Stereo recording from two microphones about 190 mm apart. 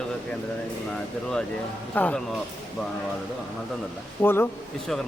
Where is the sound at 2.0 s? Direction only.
10° left (ahead or behind).